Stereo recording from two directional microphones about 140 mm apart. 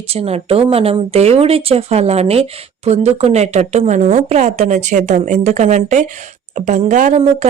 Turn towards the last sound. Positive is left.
turn(degrees=-60)  # may be behind; listen again after turning